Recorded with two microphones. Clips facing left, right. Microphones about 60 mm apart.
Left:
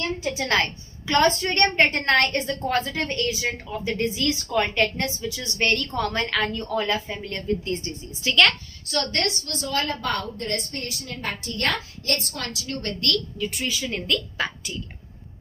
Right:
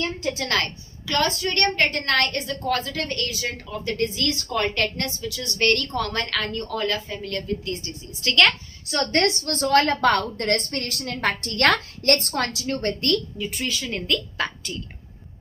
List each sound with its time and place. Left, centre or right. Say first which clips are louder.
0.3 s a woman's voice: left 2 dB; left
8.2 s a woman's voice: even; centre
8.9 s a woman's voice: right 4 dB; right
9.4 s a woman's voice: right 8 dB; right
12.1 s a woman's voice: right 5 dB; right
13.6 s a woman's voice: right 2 dB; centre